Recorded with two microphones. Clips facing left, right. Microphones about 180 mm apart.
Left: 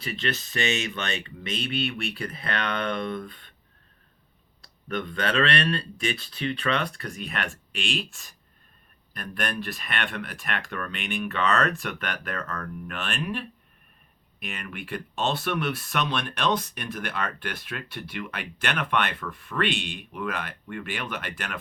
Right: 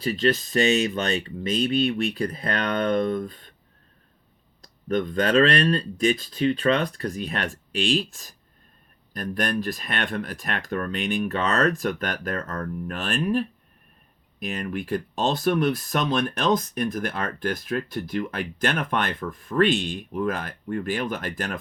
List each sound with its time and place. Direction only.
0.0 s speech: 40° right (ahead or behind)
4.6 s speech: 40° right (ahead or behind)